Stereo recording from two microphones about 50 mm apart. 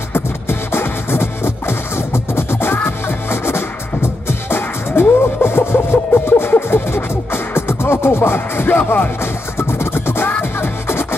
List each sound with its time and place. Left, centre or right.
0.1 s music: left
9.2 s music: left